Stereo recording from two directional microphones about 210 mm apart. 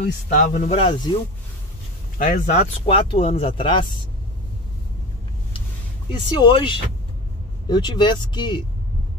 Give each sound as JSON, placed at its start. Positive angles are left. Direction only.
{"t": 0.0, "sound": "speech", "side_deg": 40}
{"t": 2.1, "sound": "speech", "side_deg": 40}
{"t": 6.3, "sound": "speech", "side_deg": 20}